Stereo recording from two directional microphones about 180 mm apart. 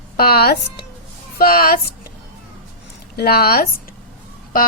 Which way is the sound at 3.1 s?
60° left (ahead or behind).